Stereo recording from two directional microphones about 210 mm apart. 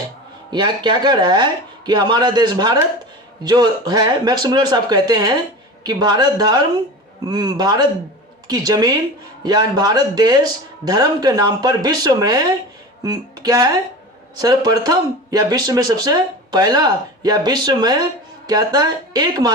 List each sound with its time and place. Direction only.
0.5 s speech: 20° right (ahead or behind)